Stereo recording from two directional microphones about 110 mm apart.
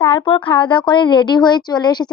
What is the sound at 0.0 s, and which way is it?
A woman's voice, 55° left (ahead or behind).